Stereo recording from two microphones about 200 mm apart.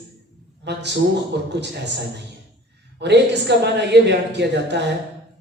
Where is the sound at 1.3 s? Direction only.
60° right (ahead or behind).